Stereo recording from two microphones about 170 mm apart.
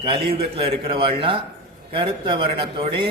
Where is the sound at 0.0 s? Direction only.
30° right (ahead or behind).